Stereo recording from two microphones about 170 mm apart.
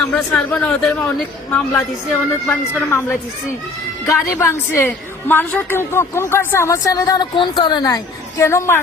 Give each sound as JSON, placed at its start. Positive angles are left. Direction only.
{"t": 0.1, "sound": "a woman's voice", "side_deg": 10}
{"t": 4.0, "sound": "a woman's voice", "side_deg": 20}